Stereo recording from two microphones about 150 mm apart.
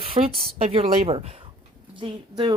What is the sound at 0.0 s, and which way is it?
Speech, 40° right (ahead or behind).